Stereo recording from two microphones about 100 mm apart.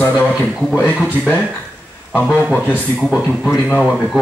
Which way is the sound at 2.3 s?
15° left (ahead or behind).